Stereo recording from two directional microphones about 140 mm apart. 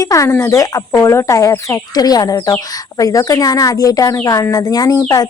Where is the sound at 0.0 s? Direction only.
25° left (ahead or behind).